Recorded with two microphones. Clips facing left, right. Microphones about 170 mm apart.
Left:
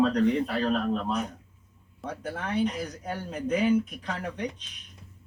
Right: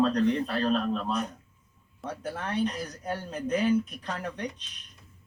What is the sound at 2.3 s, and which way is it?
Speech, 10° left (ahead or behind).